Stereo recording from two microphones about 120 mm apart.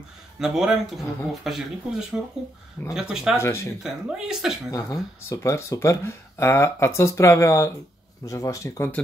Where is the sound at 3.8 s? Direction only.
5° right (ahead or behind).